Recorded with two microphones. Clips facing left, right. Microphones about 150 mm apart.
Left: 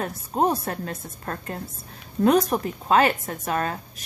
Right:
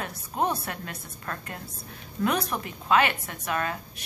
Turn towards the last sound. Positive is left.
turn(degrees=35)  # may be behind; listen again after turning